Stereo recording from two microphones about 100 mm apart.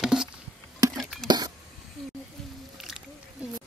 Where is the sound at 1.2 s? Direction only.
45° right (ahead or behind).